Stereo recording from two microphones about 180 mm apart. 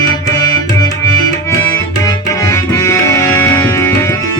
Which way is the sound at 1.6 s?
15° left (ahead or behind).